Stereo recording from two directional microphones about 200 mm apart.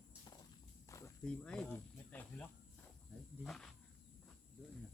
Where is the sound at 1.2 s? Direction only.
5° left (ahead or behind).